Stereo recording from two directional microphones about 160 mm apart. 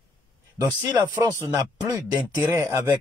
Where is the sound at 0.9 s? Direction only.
20° right (ahead or behind).